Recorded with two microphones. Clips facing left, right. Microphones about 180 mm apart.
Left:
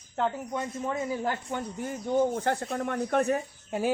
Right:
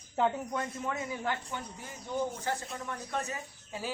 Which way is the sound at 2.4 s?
60° left (ahead or behind).